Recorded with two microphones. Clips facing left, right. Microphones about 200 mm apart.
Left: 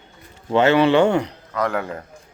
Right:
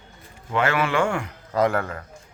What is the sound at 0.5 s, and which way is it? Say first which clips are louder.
Speech: left 8 dB; 25° left (ahead or behind).